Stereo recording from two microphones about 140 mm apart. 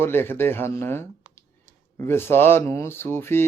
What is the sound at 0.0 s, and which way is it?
Speech, 15° left (ahead or behind).